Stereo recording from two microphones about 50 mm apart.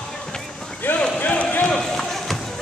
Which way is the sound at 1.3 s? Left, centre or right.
Left.